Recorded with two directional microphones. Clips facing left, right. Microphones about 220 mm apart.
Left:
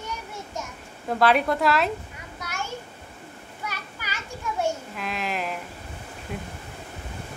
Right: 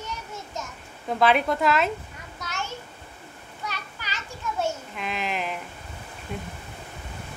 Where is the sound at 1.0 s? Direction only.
Centre (ahead or behind).